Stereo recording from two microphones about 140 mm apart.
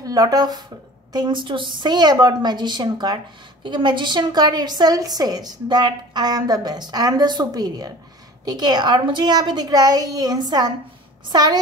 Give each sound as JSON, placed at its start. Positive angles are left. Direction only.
{"t": 0.0, "sound": "a woman's voice", "side_deg": -25}